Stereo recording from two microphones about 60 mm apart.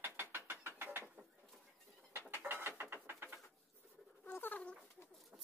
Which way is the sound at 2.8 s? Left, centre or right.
Right.